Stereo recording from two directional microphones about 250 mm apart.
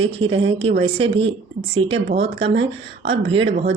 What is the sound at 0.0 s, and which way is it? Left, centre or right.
Speech, right.